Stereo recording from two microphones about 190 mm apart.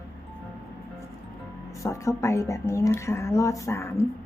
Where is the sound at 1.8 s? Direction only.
15° left (ahead or behind).